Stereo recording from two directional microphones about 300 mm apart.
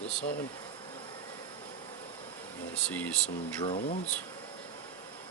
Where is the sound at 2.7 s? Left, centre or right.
Centre.